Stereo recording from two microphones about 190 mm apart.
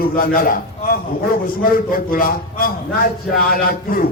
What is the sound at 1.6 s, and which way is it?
A man's voice, 50° left (ahead or behind).